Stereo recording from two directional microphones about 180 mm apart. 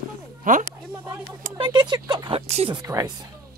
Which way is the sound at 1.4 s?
30° right (ahead or behind).